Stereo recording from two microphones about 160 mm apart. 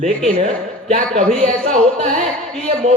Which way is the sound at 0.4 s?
50° right (ahead or behind).